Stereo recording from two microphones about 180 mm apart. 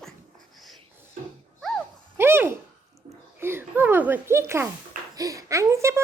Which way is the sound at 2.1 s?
10° right (ahead or behind).